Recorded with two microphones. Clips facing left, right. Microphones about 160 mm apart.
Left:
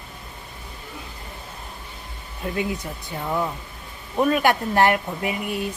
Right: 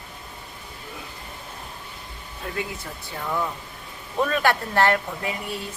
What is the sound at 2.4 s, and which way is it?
Hair dryer, 20° left (ahead or behind).